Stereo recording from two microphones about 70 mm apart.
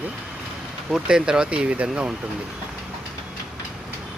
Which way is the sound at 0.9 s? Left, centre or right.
Centre.